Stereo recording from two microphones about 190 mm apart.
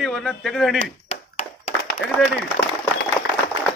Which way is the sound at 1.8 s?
70° left (ahead or behind).